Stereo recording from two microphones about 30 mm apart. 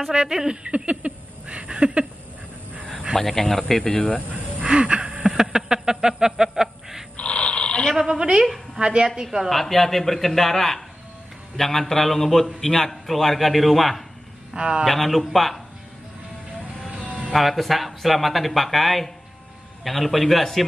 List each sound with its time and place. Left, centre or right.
0.1 s a woman's voice: right
0.7 s a sound: right
3.3 s speech: centre
4.6 s wheeze: right
5.2 s a sound: centre
7.2 s snoring: left
8.1 s a woman's voice: right
9.0 s a woman's voice: right
9.5 s speech: centre
14.6 s a woman's voice: right
14.9 s speech: centre
16.9 s music: right
17.3 s speech: centre